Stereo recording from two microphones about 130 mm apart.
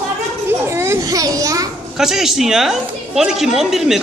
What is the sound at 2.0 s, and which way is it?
A woman's voice, 5° right (ahead or behind).